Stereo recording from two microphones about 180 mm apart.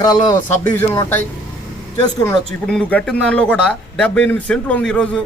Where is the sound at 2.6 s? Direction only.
5° left (ahead or behind).